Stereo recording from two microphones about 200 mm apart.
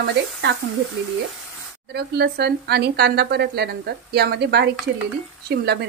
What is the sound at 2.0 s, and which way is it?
Speech, 55° right (ahead or behind).